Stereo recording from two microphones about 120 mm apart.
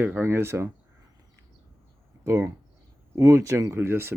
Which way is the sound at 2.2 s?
25° right (ahead or behind).